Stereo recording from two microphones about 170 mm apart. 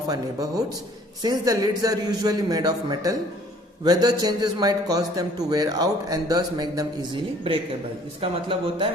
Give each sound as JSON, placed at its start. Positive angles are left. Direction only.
{"t": 0.1, "sound": "a man's voice", "side_deg": -20}